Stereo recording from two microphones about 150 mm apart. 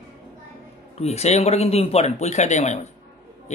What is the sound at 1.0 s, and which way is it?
Speech, 45° left (ahead or behind).